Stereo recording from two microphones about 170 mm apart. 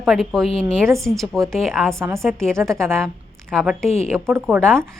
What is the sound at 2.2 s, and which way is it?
A woman's voice, 5° left (ahead or behind).